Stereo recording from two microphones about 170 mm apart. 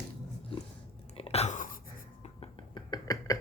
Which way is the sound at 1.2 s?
35° left (ahead or behind).